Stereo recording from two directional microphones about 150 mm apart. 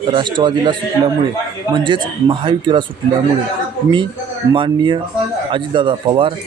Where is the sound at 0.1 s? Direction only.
30° right (ahead or behind).